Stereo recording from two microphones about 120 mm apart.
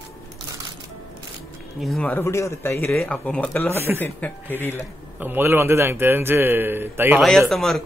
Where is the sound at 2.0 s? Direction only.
20° left (ahead or behind).